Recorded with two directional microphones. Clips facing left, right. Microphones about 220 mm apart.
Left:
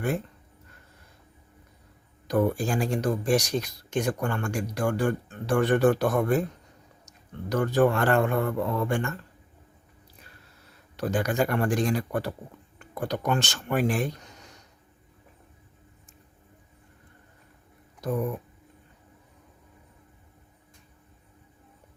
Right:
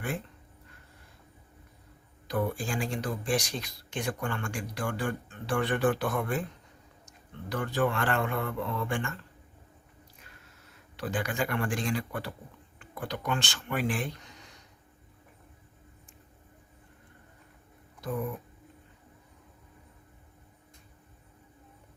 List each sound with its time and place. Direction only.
2.2 s speech: 45° left (ahead or behind)
7.5 s speech: 45° left (ahead or behind)
10.9 s speech: 40° left (ahead or behind)